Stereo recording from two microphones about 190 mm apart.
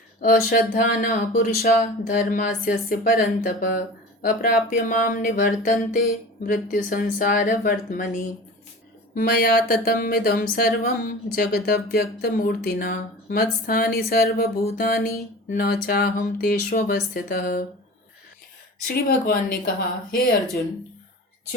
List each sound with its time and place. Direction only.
0.2 s speech: 45° left (ahead or behind)
9.1 s speech: 55° left (ahead or behind)
19.0 s speech: 50° left (ahead or behind)